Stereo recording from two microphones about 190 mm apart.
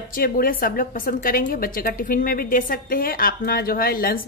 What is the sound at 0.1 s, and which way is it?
A woman's voice, 50° left (ahead or behind).